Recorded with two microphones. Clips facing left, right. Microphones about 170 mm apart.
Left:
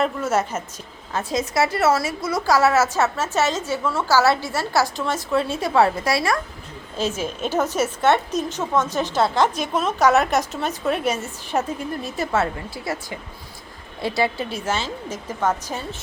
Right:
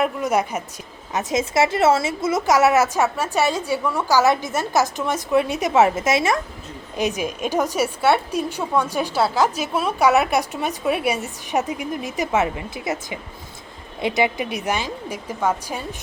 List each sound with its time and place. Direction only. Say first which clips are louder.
0.0 s a woman's voice: right 1 dB; 15° right (ahead or behind)